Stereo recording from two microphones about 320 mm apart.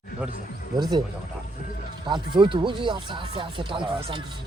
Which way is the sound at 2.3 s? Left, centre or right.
Centre.